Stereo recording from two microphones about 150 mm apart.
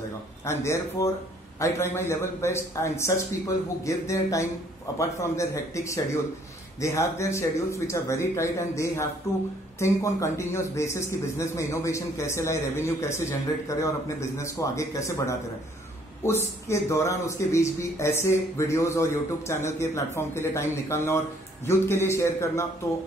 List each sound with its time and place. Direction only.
0.5 s a man's voice: 20° left (ahead or behind)